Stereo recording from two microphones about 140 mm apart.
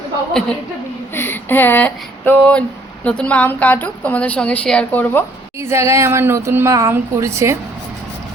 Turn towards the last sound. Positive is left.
turn(degrees=-20)  # may be behind; listen again after turning